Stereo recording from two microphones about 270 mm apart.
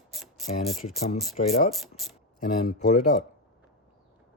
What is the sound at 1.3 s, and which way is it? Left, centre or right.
Ratchet, centre.